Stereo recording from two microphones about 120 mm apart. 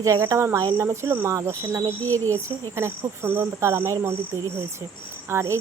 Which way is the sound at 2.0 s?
15° left (ahead or behind).